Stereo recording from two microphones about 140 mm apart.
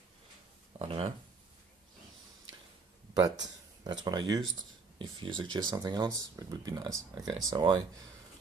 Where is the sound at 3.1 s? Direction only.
30° right (ahead or behind).